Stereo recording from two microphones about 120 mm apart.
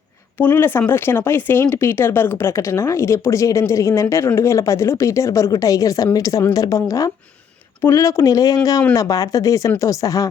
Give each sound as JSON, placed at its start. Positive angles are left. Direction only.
{"t": 0.3, "sound": "speech", "side_deg": 15}